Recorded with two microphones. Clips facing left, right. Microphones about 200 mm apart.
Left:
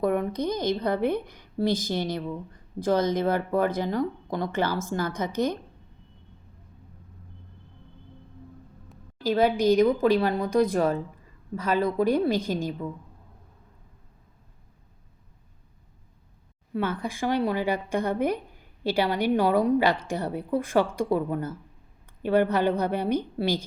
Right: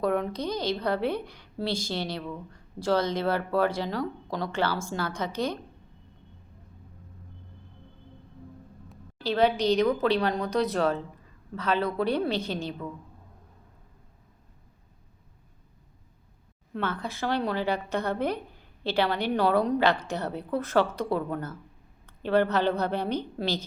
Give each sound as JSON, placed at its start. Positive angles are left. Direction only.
{"t": 0.0, "sound": "a woman's voice", "side_deg": 15}
{"t": 8.9, "sound": "a woman's voice", "side_deg": 10}
{"t": 16.7, "sound": "a woman's voice", "side_deg": 10}